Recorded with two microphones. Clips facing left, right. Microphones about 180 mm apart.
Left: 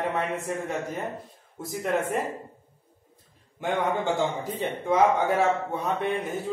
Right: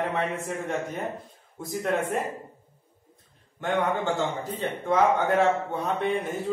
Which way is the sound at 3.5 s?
10° left (ahead or behind).